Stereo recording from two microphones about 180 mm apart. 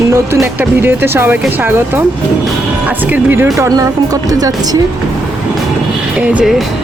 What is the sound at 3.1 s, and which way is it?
Speech, 10° right (ahead or behind).